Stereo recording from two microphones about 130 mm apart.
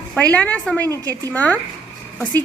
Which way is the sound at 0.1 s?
10° left (ahead or behind).